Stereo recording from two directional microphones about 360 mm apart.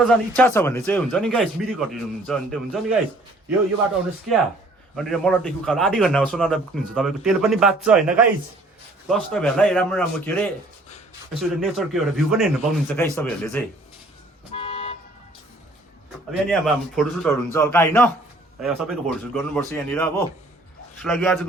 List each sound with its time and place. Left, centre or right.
0.0 s a man's voice: centre
4.9 s a man's voice: centre
14.5 s toot: centre
16.5 s a man's voice: centre